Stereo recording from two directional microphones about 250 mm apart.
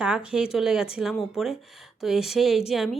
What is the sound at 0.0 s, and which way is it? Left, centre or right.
Speech, centre.